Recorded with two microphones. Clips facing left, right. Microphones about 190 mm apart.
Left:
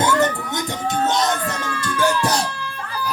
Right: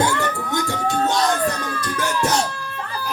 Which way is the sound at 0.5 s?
20° left (ahead or behind).